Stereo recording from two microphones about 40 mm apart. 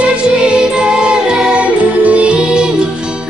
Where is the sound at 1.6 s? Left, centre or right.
Right.